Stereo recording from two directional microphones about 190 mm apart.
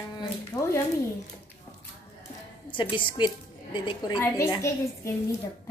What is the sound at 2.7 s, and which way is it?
A woman's voice, 25° left (ahead or behind).